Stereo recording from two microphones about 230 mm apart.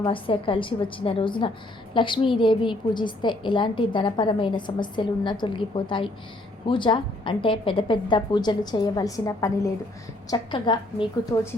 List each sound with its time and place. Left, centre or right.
0.0 s a woman's voice: left